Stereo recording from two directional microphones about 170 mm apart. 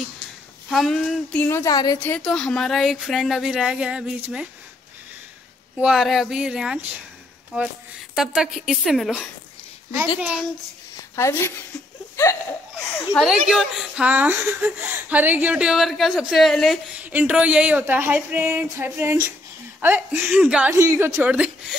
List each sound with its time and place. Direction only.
0.7 s speech: centre (ahead or behind)
1.5 s a woman's voice: 20° left (ahead or behind)
2.0 s speech: 5° left (ahead or behind)
5.8 s speech: 5° right (ahead or behind)
11.1 s a woman's voice: 15° left (ahead or behind)
12.9 s speech: 5° left (ahead or behind)